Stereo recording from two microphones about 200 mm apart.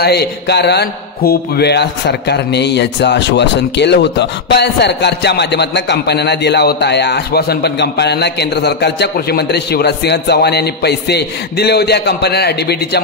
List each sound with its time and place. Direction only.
0.0 s a man's voice: 55° left (ahead or behind)